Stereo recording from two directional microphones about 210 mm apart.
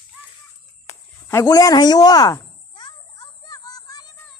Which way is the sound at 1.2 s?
15° left (ahead or behind).